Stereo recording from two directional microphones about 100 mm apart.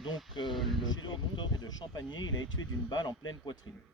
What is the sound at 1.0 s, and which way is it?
Speech, 50° left (ahead or behind).